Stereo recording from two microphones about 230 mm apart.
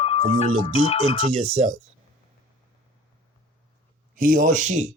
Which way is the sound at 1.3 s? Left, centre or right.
Right.